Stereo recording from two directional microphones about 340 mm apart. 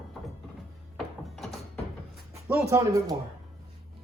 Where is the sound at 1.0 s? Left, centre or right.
Centre.